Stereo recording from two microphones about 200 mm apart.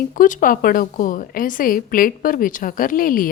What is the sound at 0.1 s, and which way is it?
A woman's voice, 40° left (ahead or behind).